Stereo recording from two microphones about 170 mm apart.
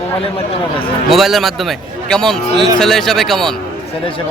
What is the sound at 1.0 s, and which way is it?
A man's voice, centre (ahead or behind).